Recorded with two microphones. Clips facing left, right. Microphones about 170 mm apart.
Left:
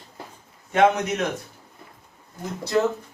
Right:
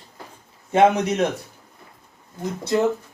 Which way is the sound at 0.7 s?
30° right (ahead or behind).